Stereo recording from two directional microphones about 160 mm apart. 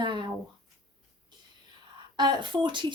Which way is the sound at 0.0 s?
30° right (ahead or behind).